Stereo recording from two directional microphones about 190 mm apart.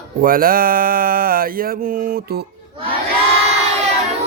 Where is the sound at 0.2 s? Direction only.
50° right (ahead or behind).